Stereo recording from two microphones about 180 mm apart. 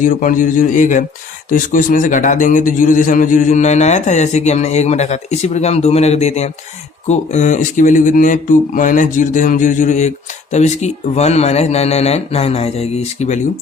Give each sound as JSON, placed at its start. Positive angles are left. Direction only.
{"t": 0.0, "sound": "a man's voice", "side_deg": 50}